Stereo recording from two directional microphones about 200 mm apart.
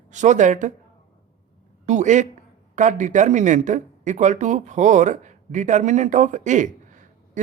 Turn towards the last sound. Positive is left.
turn(degrees=-40)  # may be behind; listen again after turning